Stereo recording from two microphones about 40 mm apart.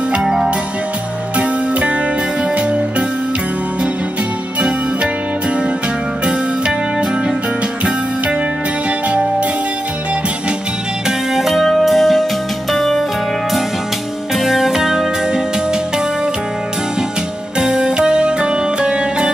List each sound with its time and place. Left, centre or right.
0.2 s music: centre
1.3 s music: right
4.6 s music: right
6.2 s music: right
9.1 s music: right
11.1 s music: centre
14.3 s music: centre
17.6 s music: centre